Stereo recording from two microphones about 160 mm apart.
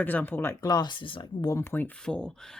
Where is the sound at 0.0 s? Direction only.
10° left (ahead or behind).